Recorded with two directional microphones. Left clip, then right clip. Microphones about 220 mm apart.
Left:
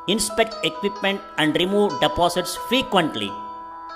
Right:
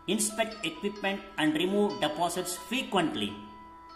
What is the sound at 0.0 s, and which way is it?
Speech, 40° left (ahead or behind).